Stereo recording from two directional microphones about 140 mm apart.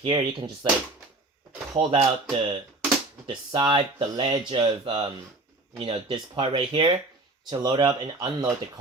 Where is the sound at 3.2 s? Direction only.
35° right (ahead or behind).